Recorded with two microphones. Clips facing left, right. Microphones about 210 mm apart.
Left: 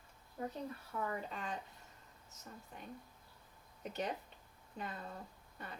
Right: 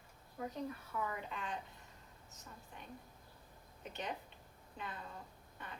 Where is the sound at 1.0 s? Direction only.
40° left (ahead or behind).